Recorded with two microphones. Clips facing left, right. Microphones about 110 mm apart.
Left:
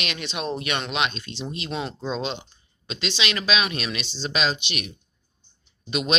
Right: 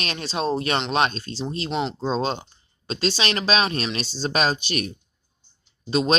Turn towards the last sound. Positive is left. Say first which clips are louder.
# right 5 dB
turn(degrees=-35)  # may be behind; listen again after turning